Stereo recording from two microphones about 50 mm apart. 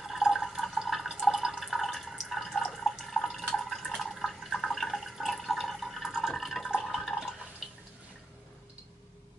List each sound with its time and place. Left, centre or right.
0.0 s drip: centre
2.3 s water: centre
7.6 s drip: centre